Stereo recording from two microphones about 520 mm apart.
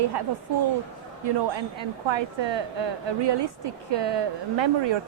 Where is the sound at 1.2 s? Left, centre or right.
Right.